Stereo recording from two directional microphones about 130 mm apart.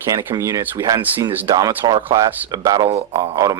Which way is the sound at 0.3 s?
25° right (ahead or behind).